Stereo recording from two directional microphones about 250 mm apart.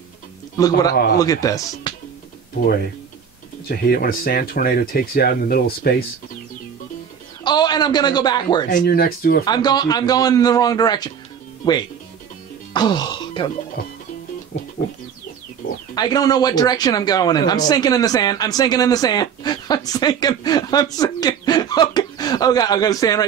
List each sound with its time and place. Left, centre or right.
0.6 s speech: centre
3.6 s speech: left
7.4 s a man's voice: centre
8.6 s speech: left
9.4 s speech: centre
12.7 s music: centre
14.5 s music: left
15.9 s speech: centre